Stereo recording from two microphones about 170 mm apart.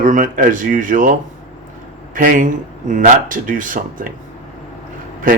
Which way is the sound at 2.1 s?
50° right (ahead or behind).